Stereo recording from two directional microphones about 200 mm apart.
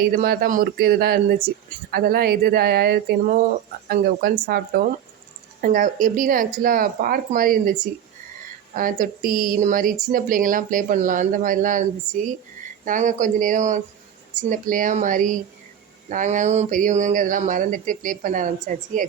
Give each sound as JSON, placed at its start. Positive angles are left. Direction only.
{"t": 0.1, "sound": "speech", "side_deg": -45}